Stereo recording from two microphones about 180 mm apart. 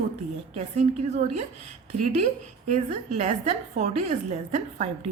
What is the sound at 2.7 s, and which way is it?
A woman's voice, 40° right (ahead or behind).